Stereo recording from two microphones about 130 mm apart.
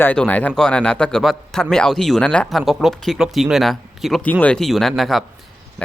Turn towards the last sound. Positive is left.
turn(degrees=0)  # may be behind; listen again after turning